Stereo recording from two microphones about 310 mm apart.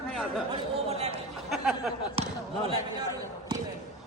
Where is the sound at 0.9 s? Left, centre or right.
Centre.